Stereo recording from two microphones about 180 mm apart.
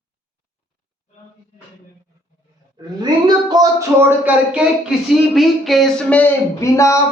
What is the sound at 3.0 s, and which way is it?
Speech, 20° right (ahead or behind).